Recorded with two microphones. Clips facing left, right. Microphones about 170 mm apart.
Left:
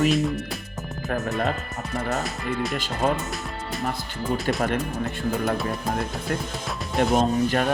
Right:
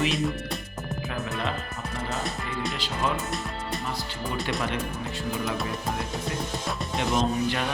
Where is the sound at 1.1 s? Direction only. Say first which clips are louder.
Left 7 dB; 40° left (ahead or behind).